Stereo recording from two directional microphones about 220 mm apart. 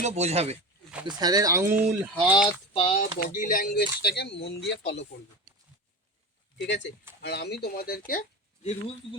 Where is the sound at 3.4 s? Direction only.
40° left (ahead or behind).